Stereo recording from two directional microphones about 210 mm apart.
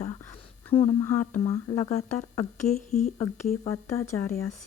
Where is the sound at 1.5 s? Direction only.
15° left (ahead or behind).